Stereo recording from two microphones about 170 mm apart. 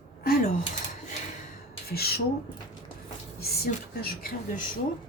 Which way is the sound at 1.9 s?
65° left (ahead or behind).